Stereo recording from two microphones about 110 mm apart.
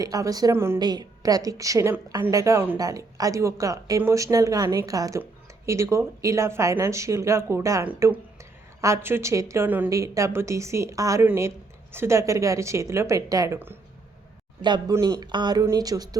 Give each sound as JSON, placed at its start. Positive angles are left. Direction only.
{"t": 0.0, "sound": "speech", "side_deg": -30}
{"t": 0.5, "sound": "a woman's voice", "side_deg": -20}
{"t": 0.8, "sound": "a woman's voice", "side_deg": -40}
{"t": 9.9, "sound": "a woman's voice", "side_deg": -30}
{"t": 14.6, "sound": "speech", "side_deg": -45}